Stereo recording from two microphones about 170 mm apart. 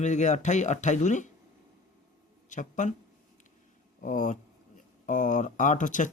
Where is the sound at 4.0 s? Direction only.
50° left (ahead or behind).